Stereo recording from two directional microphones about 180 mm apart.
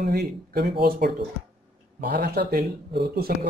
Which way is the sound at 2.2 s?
65° right (ahead or behind).